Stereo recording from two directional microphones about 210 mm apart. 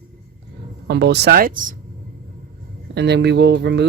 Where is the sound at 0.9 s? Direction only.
50° right (ahead or behind).